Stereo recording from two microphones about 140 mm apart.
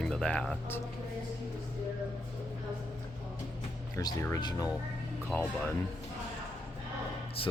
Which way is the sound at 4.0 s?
25° left (ahead or behind).